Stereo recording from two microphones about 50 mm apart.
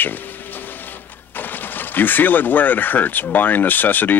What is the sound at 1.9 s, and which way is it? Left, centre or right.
Speech, left.